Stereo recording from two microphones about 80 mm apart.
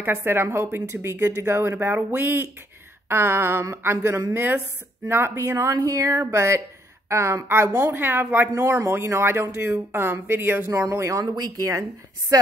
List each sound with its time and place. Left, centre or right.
0.0 s speech: right
3.1 s a sound: right
5.0 s speech: right
8.5 s speech: right
10.7 s speech: right
11.3 s speech: right